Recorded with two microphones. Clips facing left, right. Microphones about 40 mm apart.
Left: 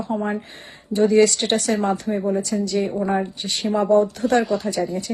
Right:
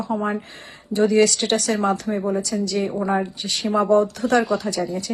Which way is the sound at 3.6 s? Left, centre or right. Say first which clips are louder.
Even; right.